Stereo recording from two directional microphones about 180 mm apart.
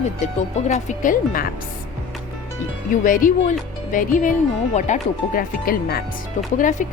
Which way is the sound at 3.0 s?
50° left (ahead or behind).